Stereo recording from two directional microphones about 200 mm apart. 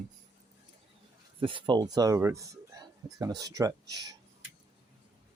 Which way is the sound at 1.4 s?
25° right (ahead or behind).